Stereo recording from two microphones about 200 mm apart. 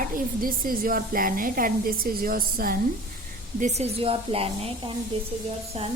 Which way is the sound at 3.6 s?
30° right (ahead or behind).